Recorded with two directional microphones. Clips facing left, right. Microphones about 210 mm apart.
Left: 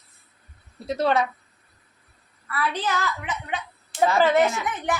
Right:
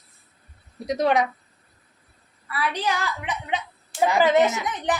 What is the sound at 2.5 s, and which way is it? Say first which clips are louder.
A woman's voice: even; 15° right (ahead or behind).